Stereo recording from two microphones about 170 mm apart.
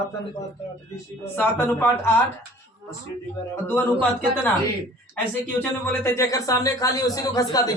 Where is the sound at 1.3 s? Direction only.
15° left (ahead or behind).